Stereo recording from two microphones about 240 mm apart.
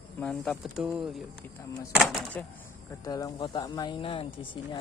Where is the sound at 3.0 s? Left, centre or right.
Centre.